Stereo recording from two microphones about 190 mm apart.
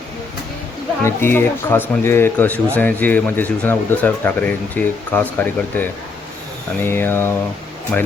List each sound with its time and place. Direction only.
1.0 s speech: 10° left (ahead or behind)